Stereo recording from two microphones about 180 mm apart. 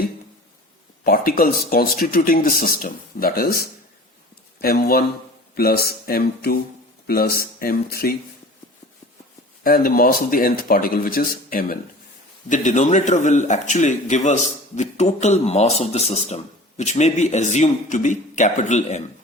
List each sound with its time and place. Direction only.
1.0 s speech: 55° left (ahead or behind)
9.6 s a man's voice: 55° left (ahead or behind)